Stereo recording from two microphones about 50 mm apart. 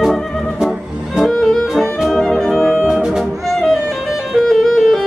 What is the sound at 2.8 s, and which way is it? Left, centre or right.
Music, centre.